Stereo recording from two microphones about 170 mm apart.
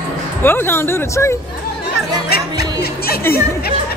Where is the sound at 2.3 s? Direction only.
65° left (ahead or behind).